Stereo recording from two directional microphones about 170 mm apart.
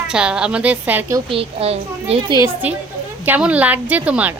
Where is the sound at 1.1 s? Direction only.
30° right (ahead or behind).